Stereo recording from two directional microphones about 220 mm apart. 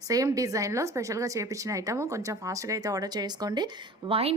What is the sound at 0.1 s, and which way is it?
A woman's voice, 15° right (ahead or behind).